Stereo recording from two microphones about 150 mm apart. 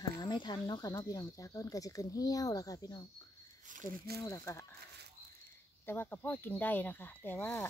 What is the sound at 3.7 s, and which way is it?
Speech, 60° right (ahead or behind).